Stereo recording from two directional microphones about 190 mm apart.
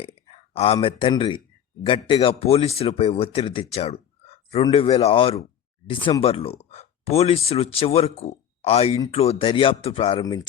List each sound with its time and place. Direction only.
0.5 s speech: 30° left (ahead or behind)